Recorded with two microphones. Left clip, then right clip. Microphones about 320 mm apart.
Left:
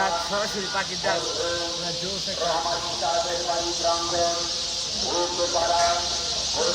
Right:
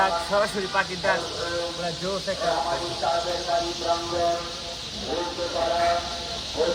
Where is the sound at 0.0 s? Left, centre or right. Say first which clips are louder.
Right 2 dB; centre.